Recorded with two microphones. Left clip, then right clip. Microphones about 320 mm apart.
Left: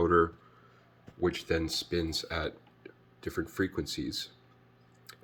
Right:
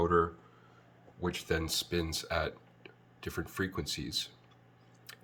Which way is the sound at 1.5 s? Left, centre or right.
Centre.